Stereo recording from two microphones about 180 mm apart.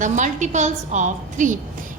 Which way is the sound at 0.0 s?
40° right (ahead or behind).